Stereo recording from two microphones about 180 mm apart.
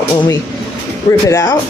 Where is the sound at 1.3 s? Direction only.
15° left (ahead or behind).